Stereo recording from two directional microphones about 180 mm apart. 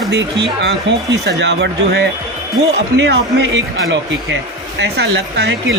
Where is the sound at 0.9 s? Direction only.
90° right.